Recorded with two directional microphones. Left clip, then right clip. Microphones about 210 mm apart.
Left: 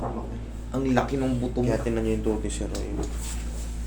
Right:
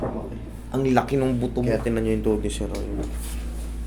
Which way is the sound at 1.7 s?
20° right (ahead or behind).